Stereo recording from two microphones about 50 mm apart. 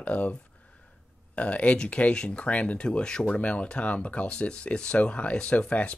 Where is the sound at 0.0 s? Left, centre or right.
Left.